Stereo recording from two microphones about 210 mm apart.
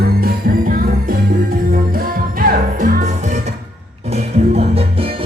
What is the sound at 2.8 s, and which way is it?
Music, 40° right (ahead or behind).